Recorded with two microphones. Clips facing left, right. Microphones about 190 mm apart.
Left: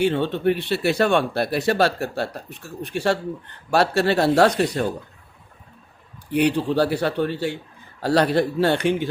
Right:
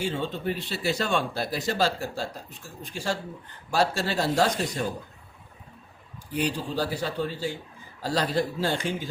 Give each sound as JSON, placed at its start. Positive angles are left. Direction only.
{"t": 0.0, "sound": "speech", "side_deg": 65}
{"t": 6.3, "sound": "speech", "side_deg": 65}